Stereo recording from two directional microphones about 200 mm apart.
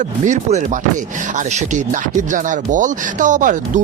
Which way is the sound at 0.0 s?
40° right (ahead or behind).